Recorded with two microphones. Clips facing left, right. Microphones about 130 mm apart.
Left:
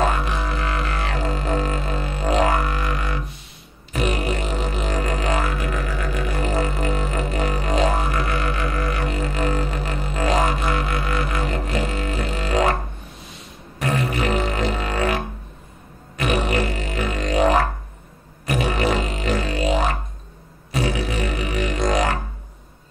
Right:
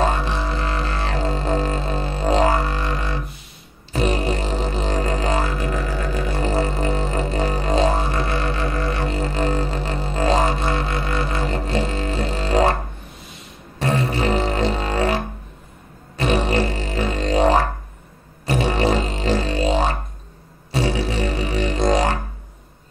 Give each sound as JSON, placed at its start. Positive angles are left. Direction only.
{"t": 0.0, "sound": "music", "side_deg": -30}
{"t": 13.7, "sound": "music", "side_deg": -30}